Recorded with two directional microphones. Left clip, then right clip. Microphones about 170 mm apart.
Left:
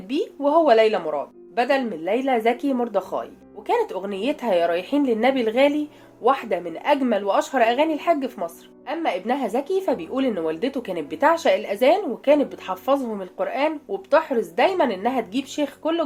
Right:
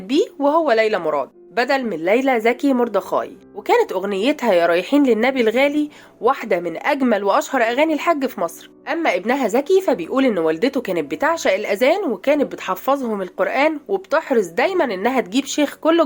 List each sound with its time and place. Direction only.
0.1 s speech: 45° right (ahead or behind)